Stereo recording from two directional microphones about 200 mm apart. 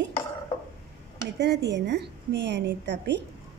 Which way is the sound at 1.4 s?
60° right (ahead or behind).